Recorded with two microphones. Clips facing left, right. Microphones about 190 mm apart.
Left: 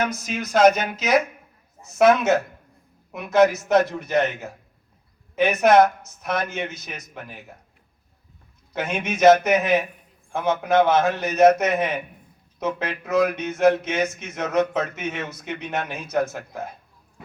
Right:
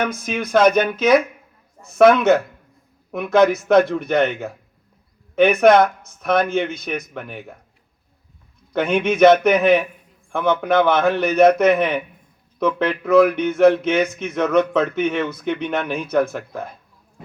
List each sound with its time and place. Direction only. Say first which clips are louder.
0.1 s speech: right 5 dB; 55° right (ahead or behind)
8.7 s speech: right 8 dB; 60° right (ahead or behind)